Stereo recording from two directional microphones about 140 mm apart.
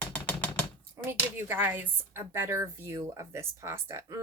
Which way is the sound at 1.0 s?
15° right (ahead or behind).